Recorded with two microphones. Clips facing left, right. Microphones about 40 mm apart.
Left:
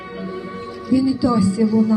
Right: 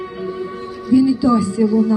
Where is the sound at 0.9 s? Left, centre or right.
Right.